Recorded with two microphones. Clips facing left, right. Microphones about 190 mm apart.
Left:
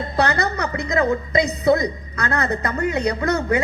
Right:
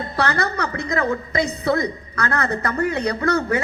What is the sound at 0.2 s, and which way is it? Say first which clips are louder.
A woman's voice: left 2 dB; 20° left (ahead or behind).